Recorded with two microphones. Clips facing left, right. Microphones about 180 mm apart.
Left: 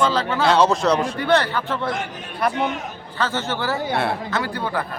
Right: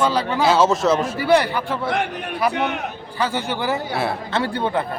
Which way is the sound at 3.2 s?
15° right (ahead or behind).